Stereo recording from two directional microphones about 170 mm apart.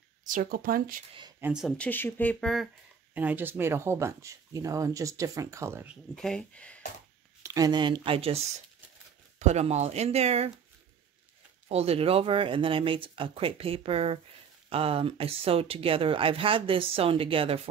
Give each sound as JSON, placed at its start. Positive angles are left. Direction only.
{"t": 0.2, "sound": "speech", "side_deg": -50}
{"t": 1.4, "sound": "speech", "side_deg": -5}
{"t": 1.8, "sound": "speech", "side_deg": 10}
{"t": 3.2, "sound": "speech", "side_deg": -10}
{"t": 6.1, "sound": "speech", "side_deg": 5}
{"t": 7.4, "sound": "speech", "side_deg": -20}
{"t": 9.4, "sound": "speech", "side_deg": -40}
{"t": 11.7, "sound": "speech", "side_deg": -35}